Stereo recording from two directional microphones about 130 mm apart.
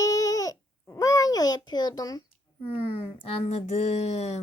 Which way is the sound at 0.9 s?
30° left (ahead or behind).